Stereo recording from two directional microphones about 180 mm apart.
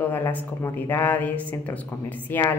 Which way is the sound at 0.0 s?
10° left (ahead or behind).